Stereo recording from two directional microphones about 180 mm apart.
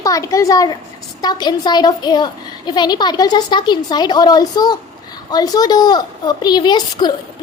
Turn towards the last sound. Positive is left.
turn(degrees=25)  # may be behind; listen again after turning